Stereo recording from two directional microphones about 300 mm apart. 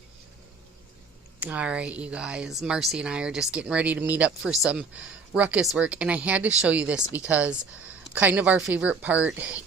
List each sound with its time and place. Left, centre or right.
1.4 s speech: centre